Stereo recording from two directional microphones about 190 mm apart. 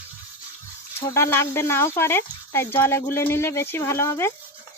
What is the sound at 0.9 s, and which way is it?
Speech, 15° left (ahead or behind).